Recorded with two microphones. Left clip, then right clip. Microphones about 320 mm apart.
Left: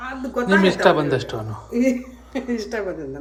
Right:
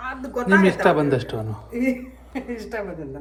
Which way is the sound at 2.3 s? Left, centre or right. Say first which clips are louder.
Left 5 dB; centre.